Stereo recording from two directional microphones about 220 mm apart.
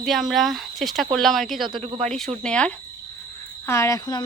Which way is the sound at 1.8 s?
30° right (ahead or behind).